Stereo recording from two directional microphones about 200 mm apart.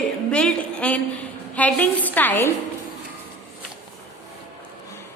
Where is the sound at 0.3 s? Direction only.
5° left (ahead or behind).